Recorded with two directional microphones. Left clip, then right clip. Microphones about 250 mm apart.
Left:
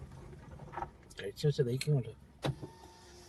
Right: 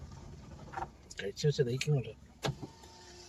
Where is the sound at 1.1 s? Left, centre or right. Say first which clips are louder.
Right 2 dB; left.